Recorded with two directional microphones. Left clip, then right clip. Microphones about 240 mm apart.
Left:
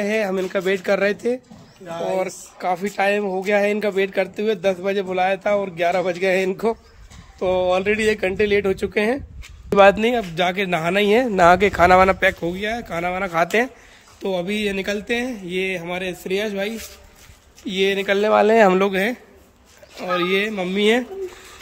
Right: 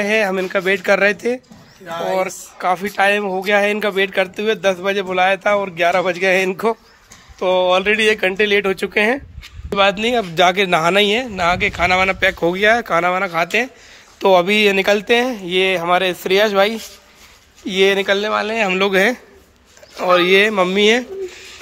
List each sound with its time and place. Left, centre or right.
0.0 s speech: centre
1.9 s speech: centre
2.1 s speech: centre
9.8 s speech: left
10.0 s speech: centre
11.1 s speech: left
14.2 s speech: centre
18.2 s speech: left
18.8 s speech: centre